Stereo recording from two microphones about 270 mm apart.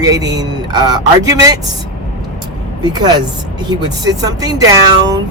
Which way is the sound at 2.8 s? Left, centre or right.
Centre.